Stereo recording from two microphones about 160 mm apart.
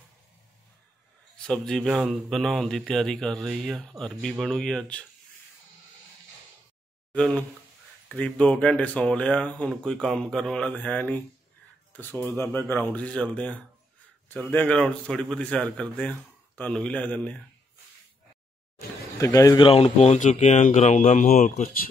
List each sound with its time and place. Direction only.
1.3 s speech: 5° left (ahead or behind)
7.1 s speech: 5° left (ahead or behind)
19.1 s speech: 20° left (ahead or behind)
19.7 s speech: 40° left (ahead or behind); by 21.8 s 60° left (ahead or behind)